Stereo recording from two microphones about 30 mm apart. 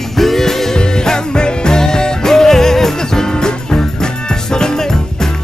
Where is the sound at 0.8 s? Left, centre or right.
Left.